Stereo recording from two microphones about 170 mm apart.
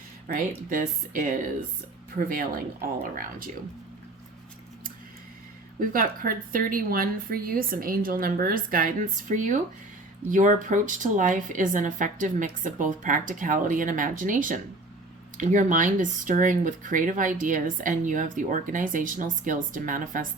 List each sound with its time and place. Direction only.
0.3 s a woman's voice: 55° right (ahead or behind)
5.8 s a woman's voice: 55° right (ahead or behind)